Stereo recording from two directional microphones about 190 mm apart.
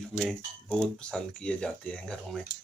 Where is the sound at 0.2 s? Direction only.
Centre (ahead or behind).